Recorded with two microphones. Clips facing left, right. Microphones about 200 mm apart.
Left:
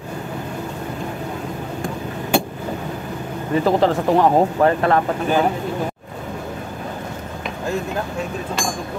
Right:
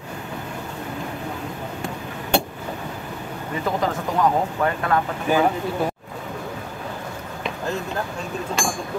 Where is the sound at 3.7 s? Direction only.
35° left (ahead or behind).